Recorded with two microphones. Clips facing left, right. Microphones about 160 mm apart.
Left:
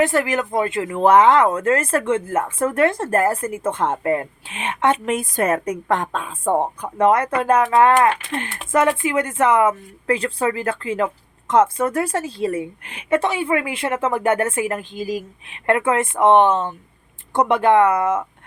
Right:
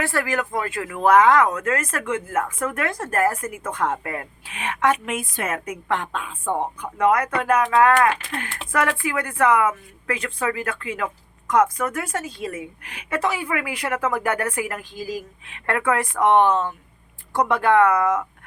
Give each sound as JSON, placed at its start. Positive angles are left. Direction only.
{"t": 0.0, "sound": "speech", "side_deg": 20}